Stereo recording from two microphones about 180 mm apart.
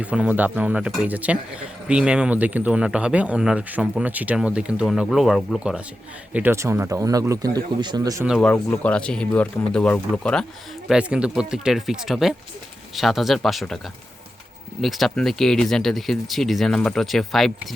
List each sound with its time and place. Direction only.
0.0 s speech: 5° right (ahead or behind)
8.4 s speech: 5° left (ahead or behind)
10.8 s speech: 5° right (ahead or behind)
14.8 s speech: centre (ahead or behind)